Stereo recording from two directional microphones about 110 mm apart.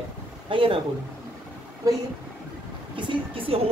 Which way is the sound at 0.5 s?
55° right (ahead or behind).